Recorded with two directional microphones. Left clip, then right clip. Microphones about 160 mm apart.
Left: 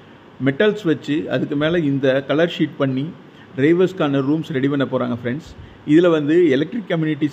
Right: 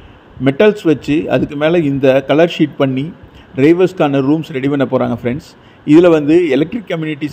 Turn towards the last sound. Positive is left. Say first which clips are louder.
# right 1 dB
turn(degrees=-25)  # may be behind; listen again after turning